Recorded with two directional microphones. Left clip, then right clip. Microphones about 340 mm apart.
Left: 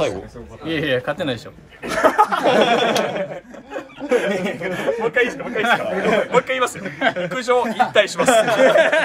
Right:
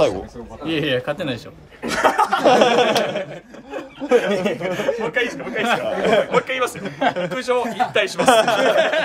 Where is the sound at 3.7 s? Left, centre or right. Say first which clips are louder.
Right 2 dB; centre.